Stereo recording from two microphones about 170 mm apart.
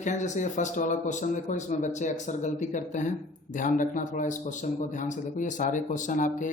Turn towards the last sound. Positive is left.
turn(degrees=50)  # may be behind; listen again after turning